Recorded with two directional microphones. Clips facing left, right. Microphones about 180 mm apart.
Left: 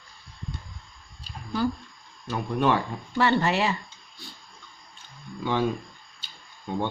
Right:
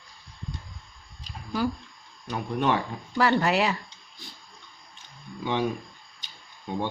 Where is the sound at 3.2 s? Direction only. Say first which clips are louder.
Even; centre (ahead or behind).